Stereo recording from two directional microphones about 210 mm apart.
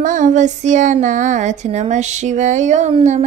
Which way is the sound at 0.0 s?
35° right (ahead or behind).